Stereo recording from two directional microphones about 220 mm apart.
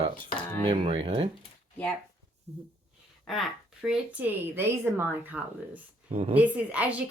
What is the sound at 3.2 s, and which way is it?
Speech, centre (ahead or behind).